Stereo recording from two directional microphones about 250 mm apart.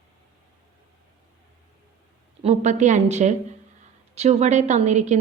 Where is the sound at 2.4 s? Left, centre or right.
Right.